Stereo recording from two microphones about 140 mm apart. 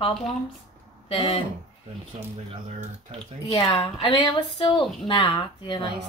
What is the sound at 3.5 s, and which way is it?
A woman's voice, 30° left (ahead or behind).